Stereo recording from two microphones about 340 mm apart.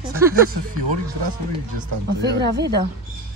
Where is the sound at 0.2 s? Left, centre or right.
Centre.